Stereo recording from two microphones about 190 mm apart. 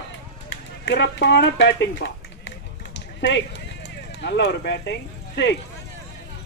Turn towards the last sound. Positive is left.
turn(degrees=65)  # may be behind; listen again after turning